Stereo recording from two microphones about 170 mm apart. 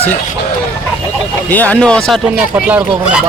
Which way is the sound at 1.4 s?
10° left (ahead or behind).